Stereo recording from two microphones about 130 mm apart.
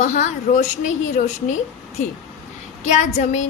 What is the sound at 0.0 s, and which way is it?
A woman's voice, 70° left (ahead or behind).